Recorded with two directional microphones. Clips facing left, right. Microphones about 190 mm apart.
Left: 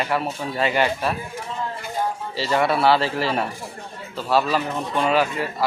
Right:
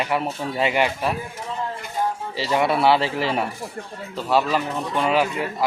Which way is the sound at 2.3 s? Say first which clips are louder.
Left 1 dB; 15° right (ahead or behind).